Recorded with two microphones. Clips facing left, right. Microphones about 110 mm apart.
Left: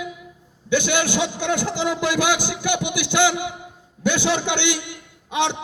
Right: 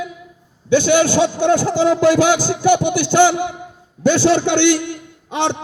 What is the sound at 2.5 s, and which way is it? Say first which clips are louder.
Speech: right 9 dB; 45° right (ahead or behind).